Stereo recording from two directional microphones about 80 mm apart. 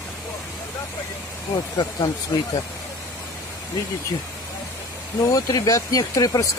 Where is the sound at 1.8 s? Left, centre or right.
Left.